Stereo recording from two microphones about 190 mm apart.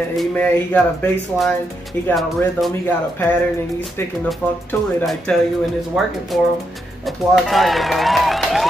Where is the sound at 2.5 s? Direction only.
Centre (ahead or behind).